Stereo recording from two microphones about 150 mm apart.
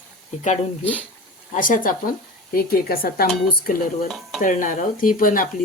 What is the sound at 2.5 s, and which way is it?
Speech, 80° left.